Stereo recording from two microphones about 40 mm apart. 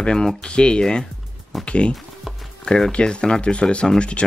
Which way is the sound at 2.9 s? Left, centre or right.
Left.